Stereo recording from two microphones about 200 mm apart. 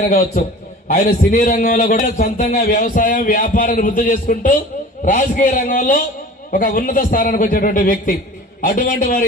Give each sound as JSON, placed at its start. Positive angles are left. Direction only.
{"t": 0.0, "sound": "a man's voice", "side_deg": 45}